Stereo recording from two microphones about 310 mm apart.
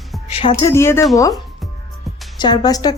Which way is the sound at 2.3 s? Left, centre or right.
Centre.